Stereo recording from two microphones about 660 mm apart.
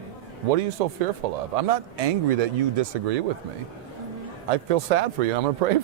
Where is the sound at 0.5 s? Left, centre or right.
Right.